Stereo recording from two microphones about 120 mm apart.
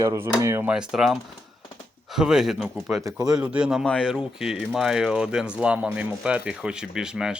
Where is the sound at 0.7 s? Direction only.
5° right (ahead or behind).